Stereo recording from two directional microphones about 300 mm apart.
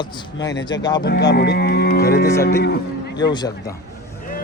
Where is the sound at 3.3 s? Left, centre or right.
Centre.